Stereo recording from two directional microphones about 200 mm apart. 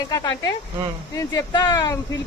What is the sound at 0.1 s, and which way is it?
A woman's voice, 20° left (ahead or behind).